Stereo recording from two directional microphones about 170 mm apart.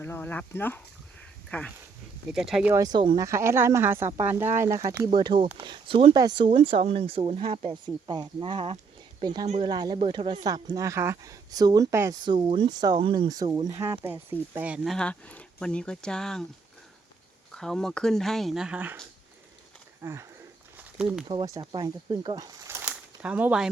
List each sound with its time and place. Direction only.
0.0 s speech: 10° left (ahead or behind)
2.7 s speech: 25° right (ahead or behind)
3.2 s speech: 15° right (ahead or behind); by 7.7 s 35° right (ahead or behind)
7.7 s speech: 25° right (ahead or behind)
12.2 s speech: 30° right (ahead or behind); by 14.9 s 10° right (ahead or behind)
14.9 s speech: 5° left (ahead or behind)
17.5 s speech: 5° left (ahead or behind)
20.0 s speech: 15° right (ahead or behind)
20.7 s a sound: 5° right (ahead or behind)
21.2 s speech: 25° right (ahead or behind)
22.6 s bird: 15° right (ahead or behind)